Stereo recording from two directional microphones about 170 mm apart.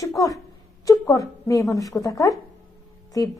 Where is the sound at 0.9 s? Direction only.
20° left (ahead or behind).